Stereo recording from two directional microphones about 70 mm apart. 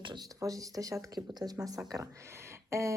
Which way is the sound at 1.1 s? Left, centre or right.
Right.